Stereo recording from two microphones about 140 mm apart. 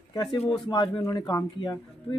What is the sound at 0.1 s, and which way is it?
Speech, 30° left (ahead or behind).